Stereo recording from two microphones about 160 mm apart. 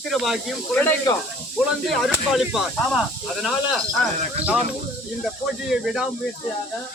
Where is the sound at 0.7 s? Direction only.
10° left (ahead or behind).